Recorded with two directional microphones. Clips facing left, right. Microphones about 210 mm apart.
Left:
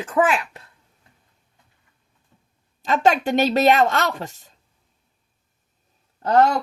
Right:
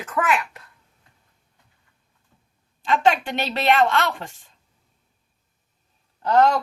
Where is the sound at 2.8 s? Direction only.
40° left (ahead or behind).